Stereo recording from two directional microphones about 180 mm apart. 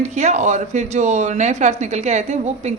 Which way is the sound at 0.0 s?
40° right (ahead or behind).